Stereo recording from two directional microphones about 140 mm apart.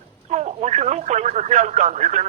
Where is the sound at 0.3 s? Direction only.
55° right (ahead or behind).